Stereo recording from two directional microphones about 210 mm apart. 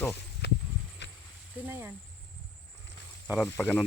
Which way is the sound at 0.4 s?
50° left (ahead or behind).